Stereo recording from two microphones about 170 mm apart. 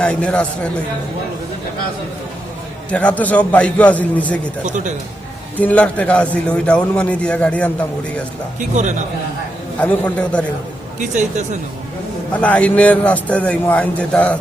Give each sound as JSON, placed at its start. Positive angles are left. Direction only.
{"t": 0.0, "sound": "a man's voice", "side_deg": 5}
{"t": 2.9, "sound": "a man's voice", "side_deg": 10}
{"t": 4.6, "sound": "a man's voice", "side_deg": -45}
{"t": 5.5, "sound": "a man's voice", "side_deg": 10}
{"t": 8.5, "sound": "a man's voice", "side_deg": -45}
{"t": 9.8, "sound": "a man's voice", "side_deg": 10}
{"t": 11.1, "sound": "a man's voice", "side_deg": -45}
{"t": 12.3, "sound": "a man's voice", "side_deg": 10}